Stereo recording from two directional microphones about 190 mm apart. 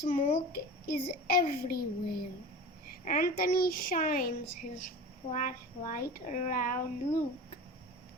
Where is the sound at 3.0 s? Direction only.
45° left (ahead or behind).